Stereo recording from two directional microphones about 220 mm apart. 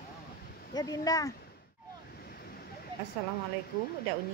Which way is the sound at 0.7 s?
15° left (ahead or behind).